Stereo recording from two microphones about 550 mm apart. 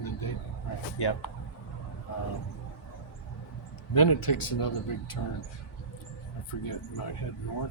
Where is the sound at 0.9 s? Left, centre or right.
Left.